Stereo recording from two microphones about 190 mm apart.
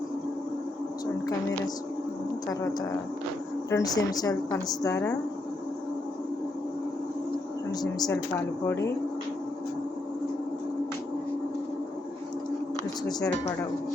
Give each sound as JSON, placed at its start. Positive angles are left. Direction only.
{"t": 2.5, "sound": "a woman's voice", "side_deg": 20}
{"t": 7.7, "sound": "a woman's voice", "side_deg": 20}
{"t": 13.1, "sound": "speech", "side_deg": 20}